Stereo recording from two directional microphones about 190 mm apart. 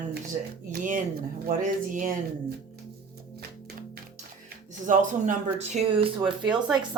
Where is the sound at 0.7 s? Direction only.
40° right (ahead or behind).